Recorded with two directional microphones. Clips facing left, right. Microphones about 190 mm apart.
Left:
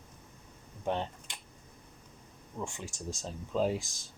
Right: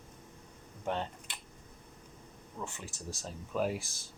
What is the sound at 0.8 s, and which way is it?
Speech, 15° left (ahead or behind).